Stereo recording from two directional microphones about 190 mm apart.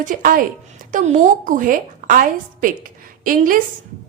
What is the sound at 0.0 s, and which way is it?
A woman's voice, 45° right (ahead or behind).